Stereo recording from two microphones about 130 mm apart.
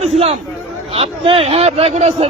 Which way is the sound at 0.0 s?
50° right (ahead or behind).